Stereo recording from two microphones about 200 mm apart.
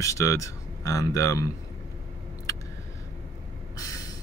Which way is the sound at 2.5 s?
15° left (ahead or behind).